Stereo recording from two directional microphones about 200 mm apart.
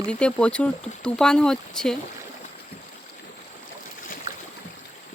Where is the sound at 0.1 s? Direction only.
5° left (ahead or behind).